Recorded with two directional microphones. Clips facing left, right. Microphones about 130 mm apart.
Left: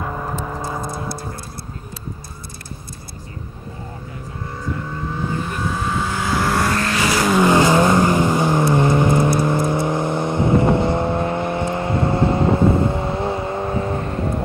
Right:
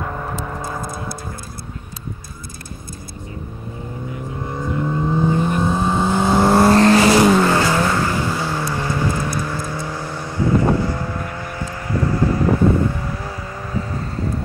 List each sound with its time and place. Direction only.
0.0 s vehicle: 5° left (ahead or behind)
4.5 s vehicle: 20° right (ahead or behind)
7.3 s vehicle: 15° left (ahead or behind)